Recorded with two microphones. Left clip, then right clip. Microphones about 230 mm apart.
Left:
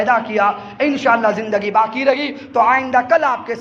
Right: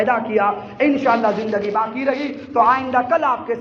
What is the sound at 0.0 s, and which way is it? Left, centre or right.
A man's voice, left.